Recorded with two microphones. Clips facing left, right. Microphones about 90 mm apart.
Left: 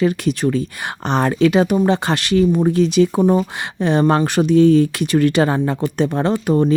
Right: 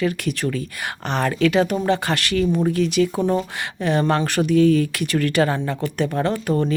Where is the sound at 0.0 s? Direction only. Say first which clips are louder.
Left 5 dB; 20° left (ahead or behind).